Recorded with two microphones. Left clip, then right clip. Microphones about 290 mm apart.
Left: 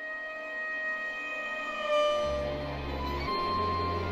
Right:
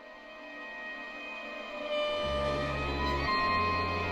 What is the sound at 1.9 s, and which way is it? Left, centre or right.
Train, centre.